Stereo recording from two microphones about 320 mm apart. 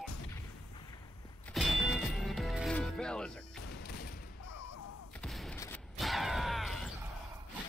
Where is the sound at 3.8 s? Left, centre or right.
Left.